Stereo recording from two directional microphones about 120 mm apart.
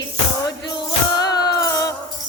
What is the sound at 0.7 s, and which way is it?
Music, 35° left (ahead or behind).